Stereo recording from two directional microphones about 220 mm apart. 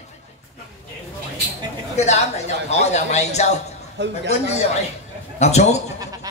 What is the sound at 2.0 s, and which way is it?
Speech, 30° left (ahead or behind).